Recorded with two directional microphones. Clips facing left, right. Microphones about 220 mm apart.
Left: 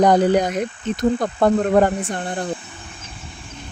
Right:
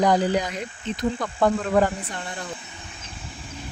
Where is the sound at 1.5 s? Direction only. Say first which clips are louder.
Left 5 dB; 55° left (ahead or behind).